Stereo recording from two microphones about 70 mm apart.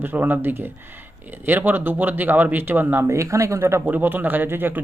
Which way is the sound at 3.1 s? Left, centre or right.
Right.